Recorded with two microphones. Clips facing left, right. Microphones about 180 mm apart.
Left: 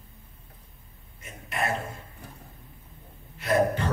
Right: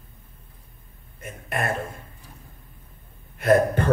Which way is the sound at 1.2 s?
50° right (ahead or behind).